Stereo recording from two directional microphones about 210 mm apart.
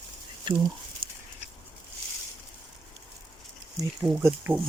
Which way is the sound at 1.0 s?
45° right (ahead or behind).